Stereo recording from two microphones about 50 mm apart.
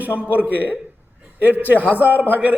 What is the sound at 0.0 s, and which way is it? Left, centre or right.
A man's voice, right.